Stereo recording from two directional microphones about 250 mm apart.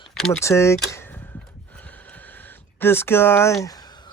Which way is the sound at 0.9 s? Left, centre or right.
Centre.